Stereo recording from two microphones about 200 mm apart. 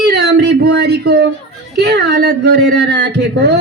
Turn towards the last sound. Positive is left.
turn(degrees=-55)  # may be behind; listen again after turning